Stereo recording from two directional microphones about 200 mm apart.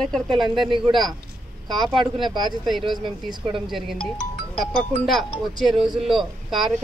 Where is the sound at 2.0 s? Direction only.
Centre (ahead or behind).